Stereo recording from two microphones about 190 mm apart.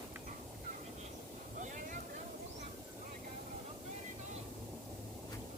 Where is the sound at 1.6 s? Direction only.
45° right (ahead or behind).